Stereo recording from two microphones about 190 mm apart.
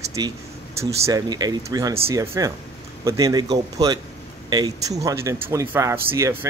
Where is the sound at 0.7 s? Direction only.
15° right (ahead or behind).